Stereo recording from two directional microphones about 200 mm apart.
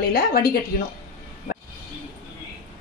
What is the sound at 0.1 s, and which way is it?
Speech, 50° left (ahead or behind).